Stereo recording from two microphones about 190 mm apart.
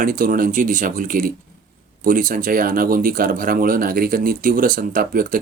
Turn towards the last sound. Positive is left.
turn(degrees=-45)  # may be behind; listen again after turning